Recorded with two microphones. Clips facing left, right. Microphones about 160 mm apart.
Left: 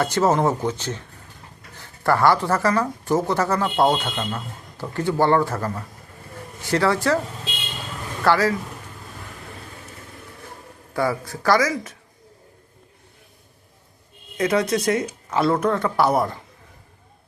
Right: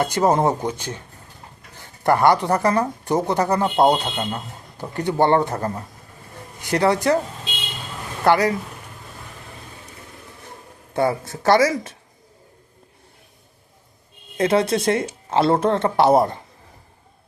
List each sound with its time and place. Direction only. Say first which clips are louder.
0.0 s speech: right 1 dB; 15° right (ahead or behind)
2.0 s speech: right 2 dB; 20° right (ahead or behind)
3.9 s speech: right 1 dB; 30° right (ahead or behind)
4.8 s speech: right 1 dB; 20° right (ahead or behind)
8.2 s speech: right 2 dB; 20° right (ahead or behind)
10.9 s speech: right 3 dB; 25° right (ahead or behind)
14.3 s speech: right 2 dB; 30° right (ahead or behind)